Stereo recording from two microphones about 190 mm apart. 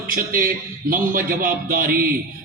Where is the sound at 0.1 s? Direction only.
50° right (ahead or behind).